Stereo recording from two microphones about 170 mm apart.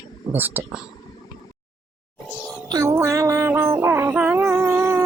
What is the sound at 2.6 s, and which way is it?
Music, 20° right (ahead or behind).